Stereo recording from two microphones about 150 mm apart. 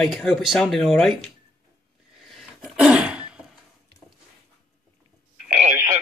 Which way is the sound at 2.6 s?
5° right (ahead or behind).